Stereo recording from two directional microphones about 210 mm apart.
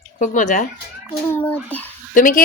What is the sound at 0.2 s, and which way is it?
Speech, 35° left (ahead or behind).